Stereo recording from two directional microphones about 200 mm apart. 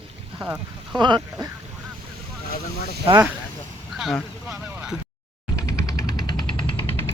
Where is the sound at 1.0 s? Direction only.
20° right (ahead or behind).